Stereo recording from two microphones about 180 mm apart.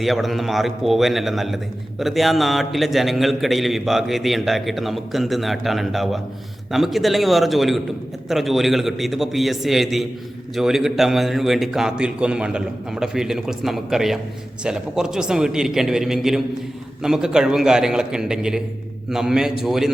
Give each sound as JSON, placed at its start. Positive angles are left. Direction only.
{"t": 0.0, "sound": "a man's voice", "side_deg": 0}